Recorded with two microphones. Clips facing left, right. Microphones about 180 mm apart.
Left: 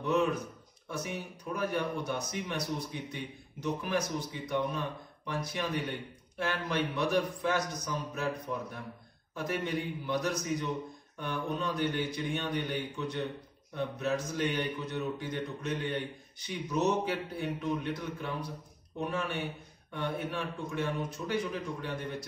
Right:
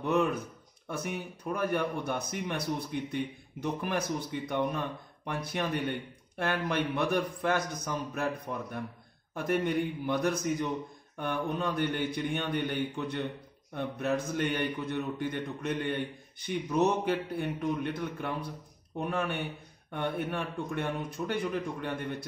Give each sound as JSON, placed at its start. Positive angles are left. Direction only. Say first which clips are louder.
{"t": 0.0, "sound": "a man's voice", "louder": "right 1 dB", "side_deg": -55}
{"t": 4.5, "sound": "a man's voice", "louder": "right 1 dB", "side_deg": -55}
{"t": 9.3, "sound": "a man's voice", "louder": "right 4 dB", "side_deg": -55}